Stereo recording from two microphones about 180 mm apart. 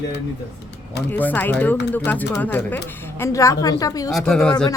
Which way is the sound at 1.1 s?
10° left (ahead or behind).